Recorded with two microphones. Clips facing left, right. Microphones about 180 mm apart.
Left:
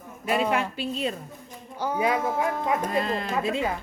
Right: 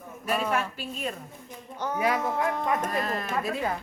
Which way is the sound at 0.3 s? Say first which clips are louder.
Left 4 dB; 25° left (ahead or behind).